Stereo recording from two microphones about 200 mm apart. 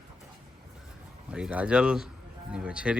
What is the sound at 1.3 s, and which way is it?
Speech, 5° right (ahead or behind).